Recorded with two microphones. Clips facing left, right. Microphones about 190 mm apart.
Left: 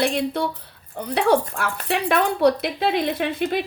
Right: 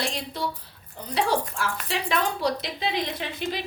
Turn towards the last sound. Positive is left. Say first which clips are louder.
# left 8 dB
turn(degrees=60)  # may be behind; listen again after turning